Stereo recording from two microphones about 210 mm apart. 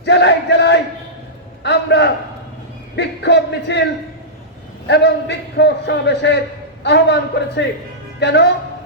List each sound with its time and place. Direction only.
0.0 s chant: 55° left (ahead or behind)
1.6 s a sound: 55° left (ahead or behind)
4.9 s a man's voice: 55° left (ahead or behind)